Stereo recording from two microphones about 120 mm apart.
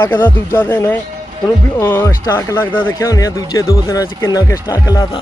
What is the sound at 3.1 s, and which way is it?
Speech, 30° left (ahead or behind).